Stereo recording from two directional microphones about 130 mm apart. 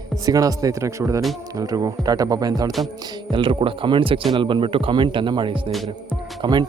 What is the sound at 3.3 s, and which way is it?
Speech, 40° right (ahead or behind).